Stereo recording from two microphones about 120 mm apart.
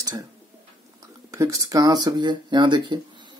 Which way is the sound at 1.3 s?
30° right (ahead or behind).